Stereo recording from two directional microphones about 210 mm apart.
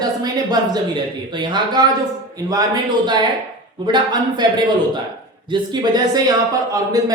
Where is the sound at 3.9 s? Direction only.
20° right (ahead or behind).